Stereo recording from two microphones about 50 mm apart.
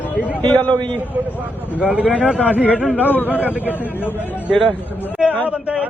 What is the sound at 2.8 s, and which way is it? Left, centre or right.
A man's voice, left.